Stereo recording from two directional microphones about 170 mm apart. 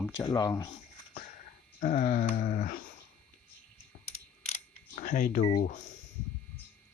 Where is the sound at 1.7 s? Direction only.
50° left (ahead or behind).